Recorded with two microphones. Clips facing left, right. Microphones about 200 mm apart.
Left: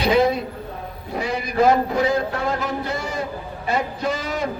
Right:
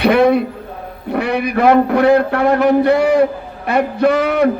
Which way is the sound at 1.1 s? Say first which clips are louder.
Right 7 dB; 65° right (ahead or behind).